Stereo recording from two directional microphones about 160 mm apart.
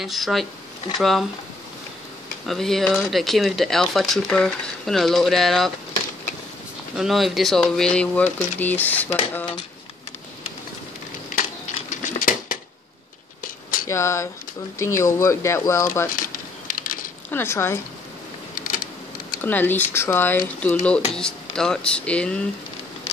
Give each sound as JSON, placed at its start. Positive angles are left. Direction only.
{"t": 0.0, "sound": "speech", "side_deg": 0}
{"t": 2.4, "sound": "speech", "side_deg": 0}
{"t": 7.0, "sound": "speech", "side_deg": 0}
{"t": 11.9, "sound": "cutlery", "side_deg": 50}
{"t": 13.4, "sound": "a sound", "side_deg": 60}
{"t": 13.8, "sound": "speech", "side_deg": 20}
{"t": 16.2, "sound": "a sound", "side_deg": 60}
{"t": 17.3, "sound": "speech", "side_deg": 15}
{"t": 19.4, "sound": "speech", "side_deg": 10}